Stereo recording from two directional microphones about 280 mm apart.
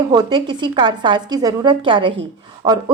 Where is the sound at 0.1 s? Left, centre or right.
Centre.